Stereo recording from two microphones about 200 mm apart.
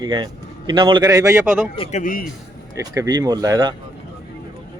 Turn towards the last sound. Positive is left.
turn(degrees=-20)  # may be behind; listen again after turning